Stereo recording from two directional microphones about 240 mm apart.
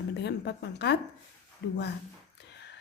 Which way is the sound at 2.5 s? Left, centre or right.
Left.